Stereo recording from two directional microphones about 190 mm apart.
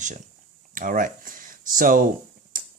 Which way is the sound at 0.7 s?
45° right (ahead or behind).